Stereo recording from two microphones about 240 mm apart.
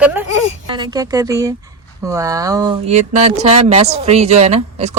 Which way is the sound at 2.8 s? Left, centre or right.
Right.